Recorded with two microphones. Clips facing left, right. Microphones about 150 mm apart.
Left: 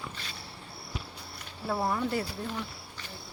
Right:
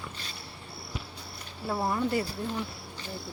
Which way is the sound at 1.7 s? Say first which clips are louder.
Right 1 dB; 5° right (ahead or behind).